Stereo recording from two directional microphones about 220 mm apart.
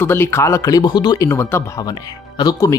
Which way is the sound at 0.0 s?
10° left (ahead or behind).